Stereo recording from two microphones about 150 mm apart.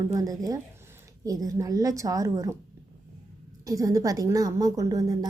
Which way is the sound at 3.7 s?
20° right (ahead or behind).